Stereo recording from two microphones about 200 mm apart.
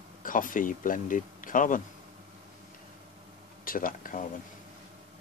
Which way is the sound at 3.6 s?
45° left (ahead or behind).